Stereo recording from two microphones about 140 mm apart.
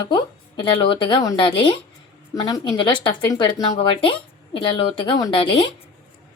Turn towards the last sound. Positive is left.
turn(degrees=35)  # may be behind; listen again after turning